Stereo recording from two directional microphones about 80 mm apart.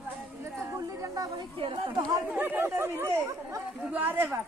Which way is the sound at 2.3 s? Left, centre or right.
Right.